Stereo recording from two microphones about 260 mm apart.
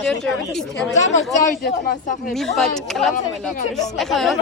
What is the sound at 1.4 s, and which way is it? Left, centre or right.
Speech, left.